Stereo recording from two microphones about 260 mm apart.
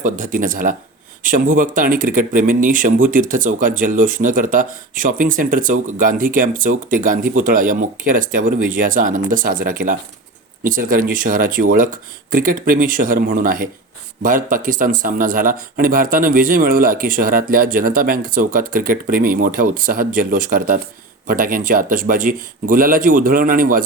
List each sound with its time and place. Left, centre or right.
0.0 s speech: right